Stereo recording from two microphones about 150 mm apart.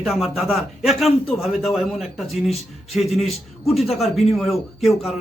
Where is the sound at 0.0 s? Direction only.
Centre (ahead or behind).